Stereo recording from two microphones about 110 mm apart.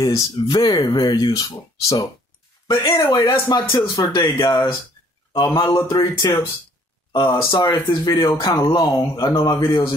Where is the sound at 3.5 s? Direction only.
40° left (ahead or behind).